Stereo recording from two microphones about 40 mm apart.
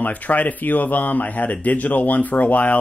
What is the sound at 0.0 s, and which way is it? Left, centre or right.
Speech, left.